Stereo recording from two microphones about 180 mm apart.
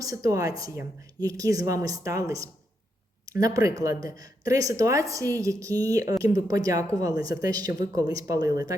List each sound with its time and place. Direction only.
0.0 s a woman's voice: 20° right (ahead or behind)